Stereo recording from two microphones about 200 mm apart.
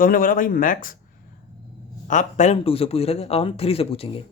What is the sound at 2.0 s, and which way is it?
A man's voice, 40° left (ahead or behind).